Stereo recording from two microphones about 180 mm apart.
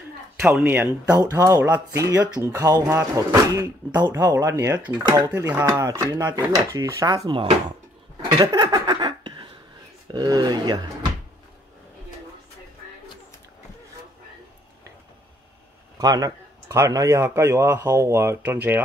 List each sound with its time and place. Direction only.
0.4 s speech: 10° right (ahead or behind)
8.2 s a sound: 20° right (ahead or behind)
10.1 s speech: 20° right (ahead or behind)
16.0 s speech: 20° right (ahead or behind)